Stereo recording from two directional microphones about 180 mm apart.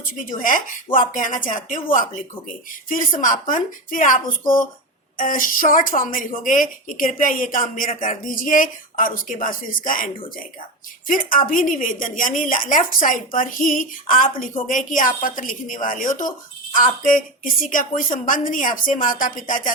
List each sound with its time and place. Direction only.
0.0 s a woman's voice: 50° left (ahead or behind)